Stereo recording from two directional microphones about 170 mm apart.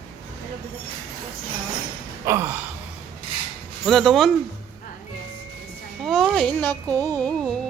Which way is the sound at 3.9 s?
Centre (ahead or behind).